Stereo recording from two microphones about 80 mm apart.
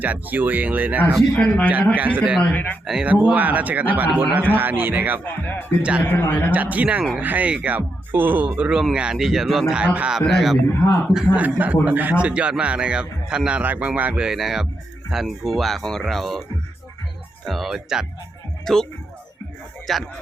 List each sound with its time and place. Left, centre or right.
0.0 s speech: right
1.4 s a man's voice: centre
2.0 s speech: right
2.4 s speech: centre
3.0 s speech: centre
5.2 s speech: left
6.5 s a man's voice: centre
10.2 s speech: centre
11.3 s a man's voice: centre
17.4 s speech: centre
18.6 s speech: centre
19.9 s speech: centre